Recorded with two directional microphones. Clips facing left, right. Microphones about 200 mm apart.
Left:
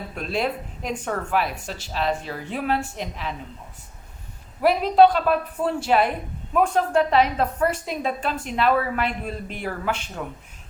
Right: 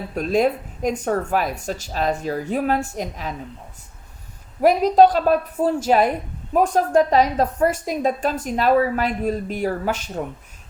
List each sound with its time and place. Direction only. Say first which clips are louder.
0.1 s a woman's voice: right 7 dB; 45° right (ahead or behind)
4.6 s a woman's voice: right 2 dB; 45° right (ahead or behind)